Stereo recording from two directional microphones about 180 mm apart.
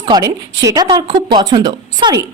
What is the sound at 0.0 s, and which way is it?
A woman's voice, 20° right (ahead or behind).